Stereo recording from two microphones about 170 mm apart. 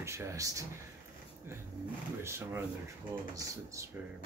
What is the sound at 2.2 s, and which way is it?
Speech, 15° right (ahead or behind).